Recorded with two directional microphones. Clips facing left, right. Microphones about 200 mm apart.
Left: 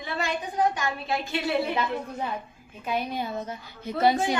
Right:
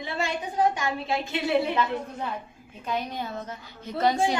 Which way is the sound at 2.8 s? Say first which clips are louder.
Left 2 dB; 10° left (ahead or behind).